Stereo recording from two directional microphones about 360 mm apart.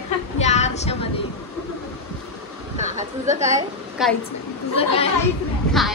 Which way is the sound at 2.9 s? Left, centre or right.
Centre.